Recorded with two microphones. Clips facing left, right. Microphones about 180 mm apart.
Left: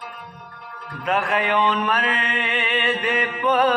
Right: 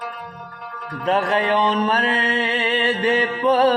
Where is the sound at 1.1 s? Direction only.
30° right (ahead or behind).